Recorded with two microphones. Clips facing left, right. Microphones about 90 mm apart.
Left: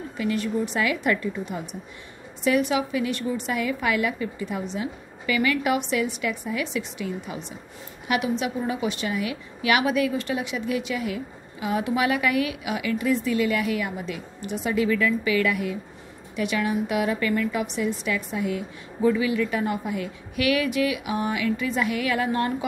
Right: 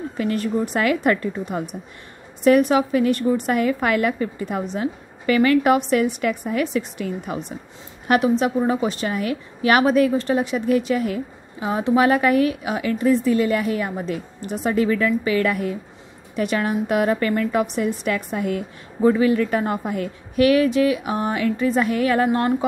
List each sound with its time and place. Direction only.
0.2 s a woman's voice: 45° right (ahead or behind)